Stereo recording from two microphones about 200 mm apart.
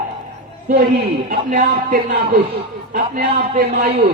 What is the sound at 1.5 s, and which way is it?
Music, 45° right (ahead or behind).